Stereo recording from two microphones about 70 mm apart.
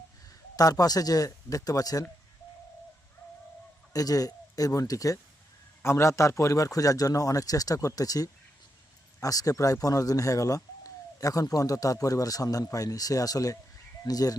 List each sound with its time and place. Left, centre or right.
0.5 s speech: left
3.9 s speech: left
5.8 s speech: left